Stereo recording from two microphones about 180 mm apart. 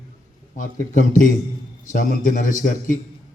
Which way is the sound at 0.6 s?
45° left (ahead or behind).